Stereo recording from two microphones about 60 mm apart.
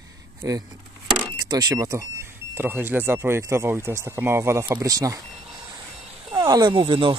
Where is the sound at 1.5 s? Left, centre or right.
Right.